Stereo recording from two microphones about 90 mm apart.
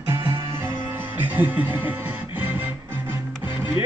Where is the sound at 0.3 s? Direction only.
35° right (ahead or behind).